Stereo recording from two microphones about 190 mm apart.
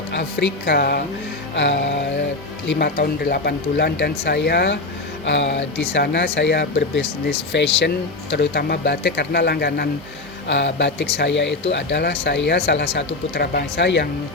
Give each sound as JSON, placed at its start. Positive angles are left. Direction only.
{"t": 0.1, "sound": "speech", "side_deg": 60}
{"t": 2.6, "sound": "speech", "side_deg": 60}
{"t": 10.5, "sound": "speech", "side_deg": 70}